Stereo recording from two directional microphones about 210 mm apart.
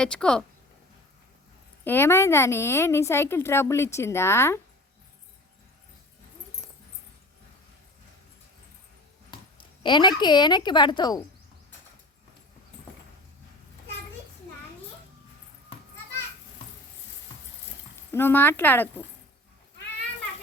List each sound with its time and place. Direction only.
0.0 s speech: 5° left (ahead or behind)
1.8 s a woman's voice: 10° left (ahead or behind)
9.8 s a woman's voice: 20° left (ahead or behind)
18.1 s a woman's voice: 10° left (ahead or behind)